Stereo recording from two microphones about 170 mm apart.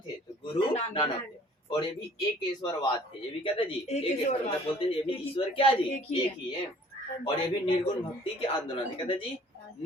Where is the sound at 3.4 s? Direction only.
35° left (ahead or behind).